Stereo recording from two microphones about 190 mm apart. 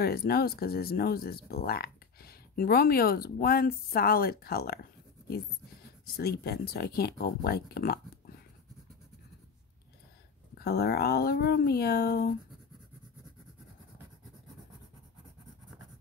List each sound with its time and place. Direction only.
0.0 s speech: 55° left (ahead or behind)
6.1 s speech: 55° left (ahead or behind)
10.5 s speech: 55° left (ahead or behind)